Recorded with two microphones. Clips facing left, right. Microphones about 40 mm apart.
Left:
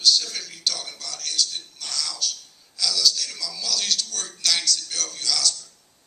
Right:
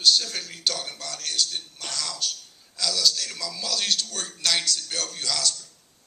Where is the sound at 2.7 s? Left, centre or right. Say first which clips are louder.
Left 1 dB; right.